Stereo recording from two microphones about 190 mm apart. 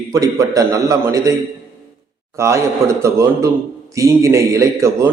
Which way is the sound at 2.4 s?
15° right (ahead or behind).